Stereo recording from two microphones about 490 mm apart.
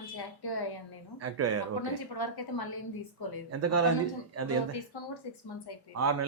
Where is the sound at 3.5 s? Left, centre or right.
Right.